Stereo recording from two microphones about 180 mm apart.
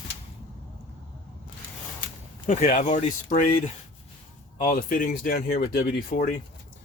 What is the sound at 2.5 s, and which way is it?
Speech, 50° left (ahead or behind).